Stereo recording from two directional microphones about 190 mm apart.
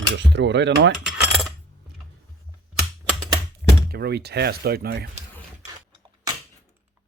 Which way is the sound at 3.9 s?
60° right (ahead or behind).